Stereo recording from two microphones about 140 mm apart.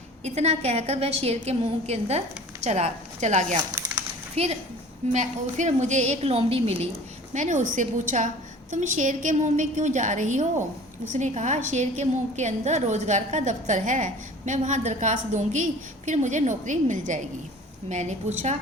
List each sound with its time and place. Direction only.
0.3 s a woman's voice: 50° right (ahead or behind)
5.1 s a woman's voice: 60° right (ahead or behind)
7.3 s a woman's voice: 60° right (ahead or behind)